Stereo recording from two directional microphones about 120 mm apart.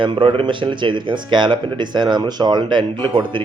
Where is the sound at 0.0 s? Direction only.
45° right (ahead or behind).